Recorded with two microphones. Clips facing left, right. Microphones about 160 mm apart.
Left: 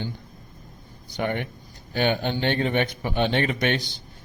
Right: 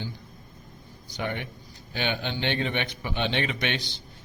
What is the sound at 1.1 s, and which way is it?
A man's voice, 55° left (ahead or behind).